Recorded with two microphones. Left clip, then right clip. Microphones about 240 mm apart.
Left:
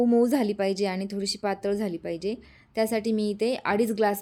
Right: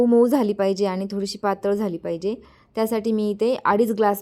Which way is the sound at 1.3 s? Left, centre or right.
Centre.